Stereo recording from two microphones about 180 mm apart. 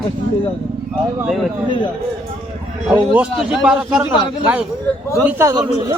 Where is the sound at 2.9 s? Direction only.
5° right (ahead or behind).